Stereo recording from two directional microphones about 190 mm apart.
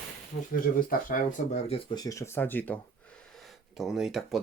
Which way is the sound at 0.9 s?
45° left (ahead or behind).